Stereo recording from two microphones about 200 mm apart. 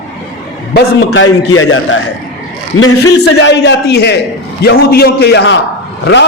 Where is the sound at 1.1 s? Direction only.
80° left.